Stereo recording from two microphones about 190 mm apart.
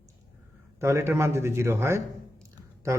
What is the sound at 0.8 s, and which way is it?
A man's voice, 15° right (ahead or behind).